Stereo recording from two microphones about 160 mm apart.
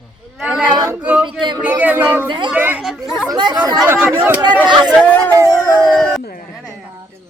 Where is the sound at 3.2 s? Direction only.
30° right (ahead or behind).